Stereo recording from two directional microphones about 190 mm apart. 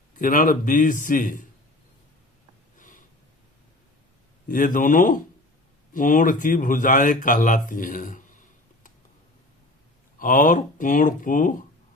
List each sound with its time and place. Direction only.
0.2 s speech: 45° left (ahead or behind)
2.7 s snort: 45° left (ahead or behind)
4.4 s speech: 45° left (ahead or behind)
10.2 s speech: 45° left (ahead or behind)